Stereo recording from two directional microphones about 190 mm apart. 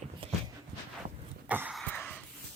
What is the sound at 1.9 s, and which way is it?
Dog, 10° left (ahead or behind).